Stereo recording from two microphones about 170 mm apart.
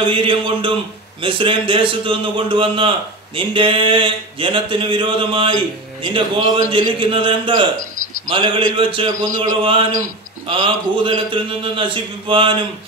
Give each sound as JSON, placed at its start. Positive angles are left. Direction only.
{"t": 0.0, "sound": "a man's voice", "side_deg": -30}